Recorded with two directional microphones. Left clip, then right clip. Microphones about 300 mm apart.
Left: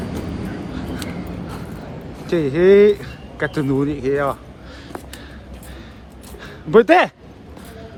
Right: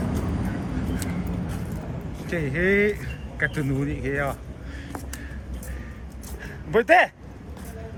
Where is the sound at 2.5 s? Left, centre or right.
Centre.